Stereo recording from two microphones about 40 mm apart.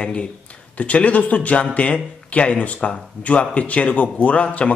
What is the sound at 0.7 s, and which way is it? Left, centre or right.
A man's voice, left.